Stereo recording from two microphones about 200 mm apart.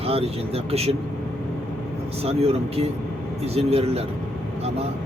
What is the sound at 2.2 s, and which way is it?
Speech, 30° right (ahead or behind).